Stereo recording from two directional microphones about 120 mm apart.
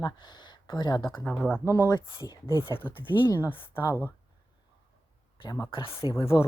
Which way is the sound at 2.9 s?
45° left (ahead or behind).